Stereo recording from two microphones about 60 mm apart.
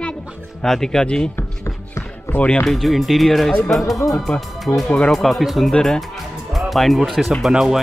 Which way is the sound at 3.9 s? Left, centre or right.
Left.